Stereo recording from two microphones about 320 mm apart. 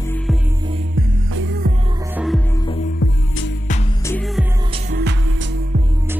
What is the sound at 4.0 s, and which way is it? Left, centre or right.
Music, centre.